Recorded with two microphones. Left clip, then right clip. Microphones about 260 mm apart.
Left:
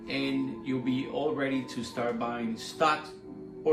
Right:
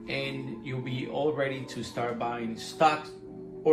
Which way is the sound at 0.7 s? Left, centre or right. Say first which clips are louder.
Left 2 dB; right.